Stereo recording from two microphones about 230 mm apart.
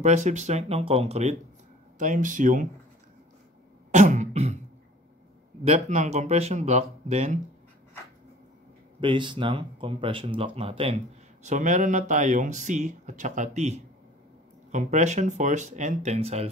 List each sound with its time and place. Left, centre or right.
0.0 s speech: right
3.9 s beatboxing: right
5.6 s speech: right
9.0 s speech: right